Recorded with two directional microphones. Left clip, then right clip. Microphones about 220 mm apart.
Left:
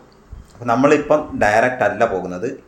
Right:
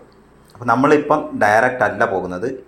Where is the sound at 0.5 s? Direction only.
5° left (ahead or behind).